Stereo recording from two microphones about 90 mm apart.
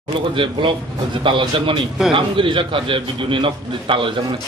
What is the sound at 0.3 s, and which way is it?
A man's voice, 70° right (ahead or behind).